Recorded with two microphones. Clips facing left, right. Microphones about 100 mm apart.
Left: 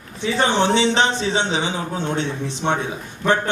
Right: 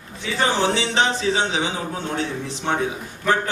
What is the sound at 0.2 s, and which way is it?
Speech, 25° left (ahead or behind).